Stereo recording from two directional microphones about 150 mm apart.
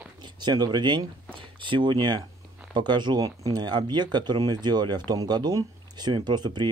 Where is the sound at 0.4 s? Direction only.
30° right (ahead or behind).